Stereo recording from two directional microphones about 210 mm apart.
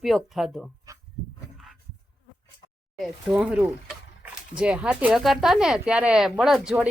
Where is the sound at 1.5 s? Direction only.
Centre (ahead or behind).